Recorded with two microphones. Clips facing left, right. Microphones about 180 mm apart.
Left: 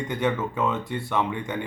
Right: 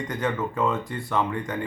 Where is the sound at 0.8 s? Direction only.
25° left (ahead or behind).